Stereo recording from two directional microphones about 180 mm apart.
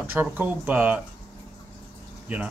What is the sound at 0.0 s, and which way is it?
Speech, 10° right (ahead or behind).